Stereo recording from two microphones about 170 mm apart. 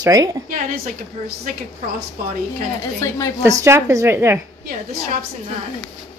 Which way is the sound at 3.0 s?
15° left (ahead or behind).